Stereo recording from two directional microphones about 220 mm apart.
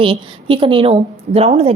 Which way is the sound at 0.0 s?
25° right (ahead or behind).